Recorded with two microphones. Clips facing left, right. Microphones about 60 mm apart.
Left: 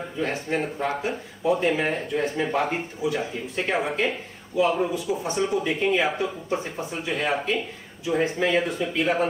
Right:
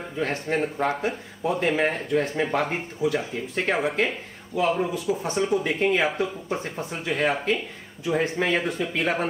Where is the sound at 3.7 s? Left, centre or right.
Centre.